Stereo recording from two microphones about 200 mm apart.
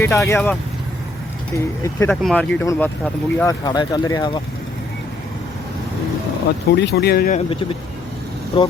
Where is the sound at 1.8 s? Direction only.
10° left (ahead or behind).